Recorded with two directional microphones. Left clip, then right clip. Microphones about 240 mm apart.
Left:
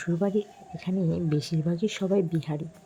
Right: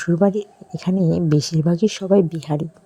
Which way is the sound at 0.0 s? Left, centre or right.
Right.